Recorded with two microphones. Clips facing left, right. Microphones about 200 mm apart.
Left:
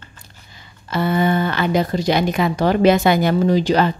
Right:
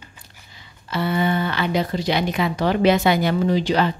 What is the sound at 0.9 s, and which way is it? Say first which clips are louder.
A woman's voice: left 3 dB; 45° left (ahead or behind).